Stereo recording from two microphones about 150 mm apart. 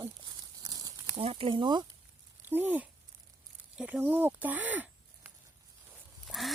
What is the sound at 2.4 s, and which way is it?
Speech, 10° right (ahead or behind).